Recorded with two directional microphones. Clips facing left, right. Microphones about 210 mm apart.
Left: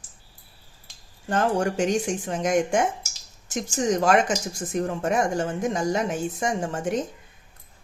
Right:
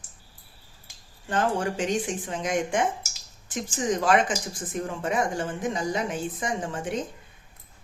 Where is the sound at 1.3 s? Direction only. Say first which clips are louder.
Left 3 dB; 45° left (ahead or behind).